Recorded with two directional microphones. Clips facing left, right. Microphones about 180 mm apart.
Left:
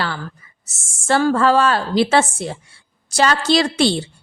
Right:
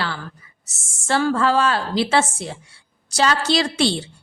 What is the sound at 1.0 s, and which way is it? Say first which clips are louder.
A woman's voice: left 3 dB; 50° left (ahead or behind).